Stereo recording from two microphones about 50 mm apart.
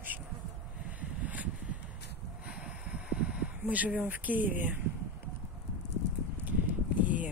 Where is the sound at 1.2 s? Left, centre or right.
Right.